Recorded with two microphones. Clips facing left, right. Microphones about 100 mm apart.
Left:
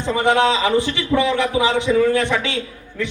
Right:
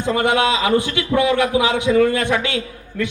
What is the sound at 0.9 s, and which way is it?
A man's voice, 55° right (ahead or behind).